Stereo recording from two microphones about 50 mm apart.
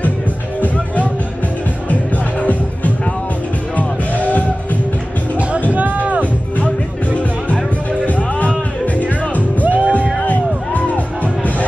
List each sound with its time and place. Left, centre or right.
3.7 s music: left
5.7 s music: right
8.0 s music: left
9.7 s music: right
10.2 s music: left